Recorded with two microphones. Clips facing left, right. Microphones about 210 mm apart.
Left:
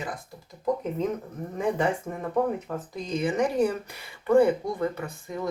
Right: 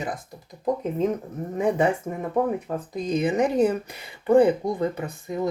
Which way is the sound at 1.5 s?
20° right (ahead or behind).